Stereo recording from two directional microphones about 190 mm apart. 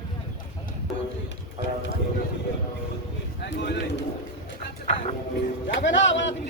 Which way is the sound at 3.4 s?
60° left (ahead or behind).